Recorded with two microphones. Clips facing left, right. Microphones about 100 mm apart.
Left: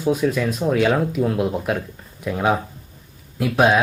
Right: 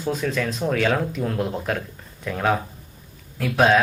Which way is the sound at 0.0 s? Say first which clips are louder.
Left 5 dB; 10° left (ahead or behind).